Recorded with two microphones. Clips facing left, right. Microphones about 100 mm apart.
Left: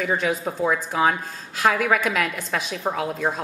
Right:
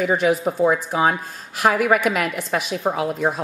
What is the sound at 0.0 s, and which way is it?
A woman's voice, 5° right (ahead or behind).